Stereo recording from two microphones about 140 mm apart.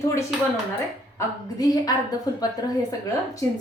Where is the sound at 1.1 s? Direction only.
25° left (ahead or behind).